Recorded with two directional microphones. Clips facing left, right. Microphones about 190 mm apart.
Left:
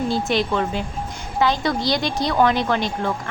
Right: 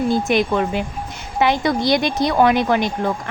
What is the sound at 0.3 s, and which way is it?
A woman's voice, 15° right (ahead or behind).